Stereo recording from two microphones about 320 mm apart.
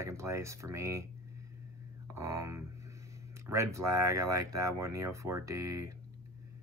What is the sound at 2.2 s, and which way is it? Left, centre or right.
Speech, centre.